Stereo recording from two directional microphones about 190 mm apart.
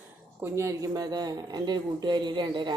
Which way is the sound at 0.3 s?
15° right (ahead or behind).